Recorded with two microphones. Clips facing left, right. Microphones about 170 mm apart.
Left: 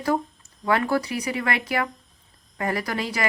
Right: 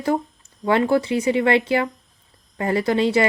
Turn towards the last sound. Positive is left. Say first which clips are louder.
# right 9 dB
turn(degrees=-25)  # may be behind; listen again after turning